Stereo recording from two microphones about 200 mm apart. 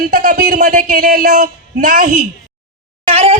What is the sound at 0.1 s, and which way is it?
Speech, 50° right (ahead or behind).